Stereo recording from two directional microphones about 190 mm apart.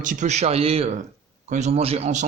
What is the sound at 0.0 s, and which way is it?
Speech, 40° right (ahead or behind).